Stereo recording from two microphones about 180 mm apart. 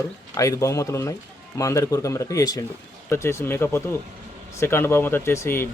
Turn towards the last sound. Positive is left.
turn(degrees=15)  # may be behind; listen again after turning